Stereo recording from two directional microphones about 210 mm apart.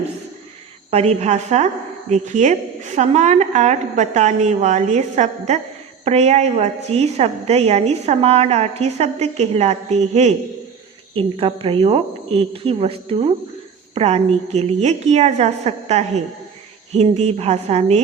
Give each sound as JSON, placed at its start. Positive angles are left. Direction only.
{"t": 0.9, "sound": "a woman's voice", "side_deg": -30}